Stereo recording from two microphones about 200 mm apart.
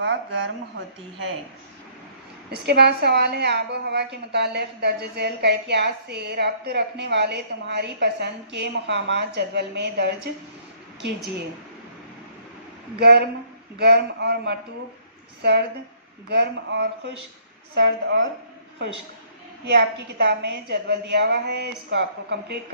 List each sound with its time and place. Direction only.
0.0 s speech: 65° right (ahead or behind)
2.6 s a woman's voice: 55° right (ahead or behind)
13.0 s a woman's voice: 55° right (ahead or behind)
19.6 s a woman's voice: 60° right (ahead or behind)